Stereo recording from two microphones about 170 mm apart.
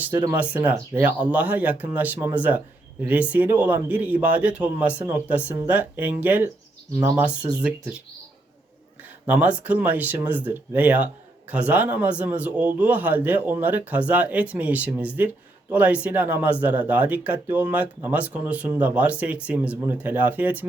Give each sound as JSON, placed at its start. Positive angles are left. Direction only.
{"t": 0.1, "sound": "speech", "side_deg": -25}
{"t": 0.5, "sound": "speech", "side_deg": -10}
{"t": 9.2, "sound": "speech", "side_deg": -10}